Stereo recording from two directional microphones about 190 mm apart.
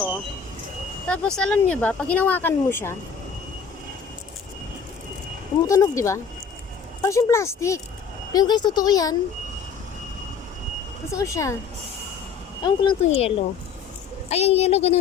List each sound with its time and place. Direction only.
1.0 s speech: 5° left (ahead or behind)
5.6 s speech: 15° left (ahead or behind)
11.1 s speech: 15° left (ahead or behind)
12.6 s a woman's voice: 30° left (ahead or behind)